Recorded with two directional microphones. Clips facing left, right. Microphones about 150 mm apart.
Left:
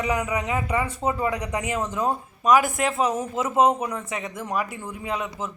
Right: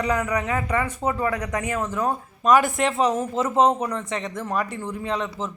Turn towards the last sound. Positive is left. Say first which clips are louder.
# right 2 dB
turn(degrees=10)  # may be behind; listen again after turning